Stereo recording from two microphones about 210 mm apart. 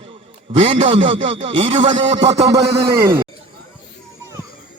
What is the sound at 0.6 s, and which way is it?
Speech, 25° right (ahead or behind).